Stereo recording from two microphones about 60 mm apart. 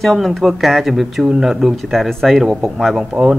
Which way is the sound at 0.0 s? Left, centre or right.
Centre.